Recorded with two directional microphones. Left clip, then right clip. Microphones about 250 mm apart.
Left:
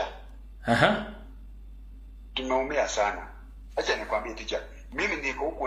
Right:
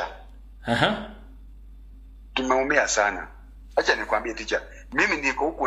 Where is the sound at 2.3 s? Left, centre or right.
Right.